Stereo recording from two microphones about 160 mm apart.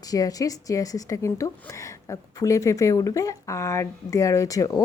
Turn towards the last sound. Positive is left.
turn(degrees=20)  # may be behind; listen again after turning